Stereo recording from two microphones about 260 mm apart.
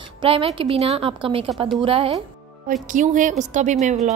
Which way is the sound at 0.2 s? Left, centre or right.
Right.